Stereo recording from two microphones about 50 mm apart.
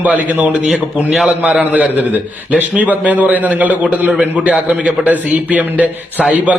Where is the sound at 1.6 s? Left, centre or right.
Right.